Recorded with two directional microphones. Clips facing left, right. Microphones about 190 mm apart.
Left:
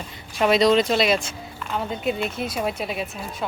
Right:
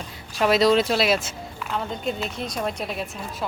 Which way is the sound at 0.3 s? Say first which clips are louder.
Left 1 dB; centre (ahead or behind).